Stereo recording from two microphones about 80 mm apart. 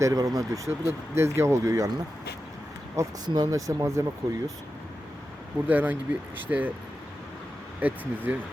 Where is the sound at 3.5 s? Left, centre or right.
Right.